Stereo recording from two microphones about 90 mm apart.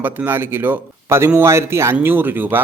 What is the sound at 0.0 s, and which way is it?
Speech, 20° right (ahead or behind).